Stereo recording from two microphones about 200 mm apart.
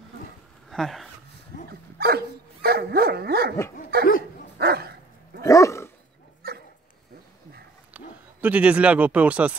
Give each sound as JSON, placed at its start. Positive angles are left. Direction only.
{"t": 0.7, "sound": "speech", "side_deg": 0}
{"t": 1.7, "sound": "dog", "side_deg": -50}
{"t": 5.4, "sound": "dog", "side_deg": 15}
{"t": 6.4, "sound": "dog", "side_deg": -50}
{"t": 7.9, "sound": "speech", "side_deg": -10}